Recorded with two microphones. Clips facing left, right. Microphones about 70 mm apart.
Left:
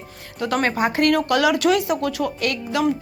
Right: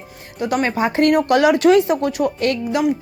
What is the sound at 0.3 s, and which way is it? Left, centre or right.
A woman's voice, centre.